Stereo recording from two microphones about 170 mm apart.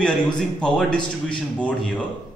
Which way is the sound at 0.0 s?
5° left (ahead or behind).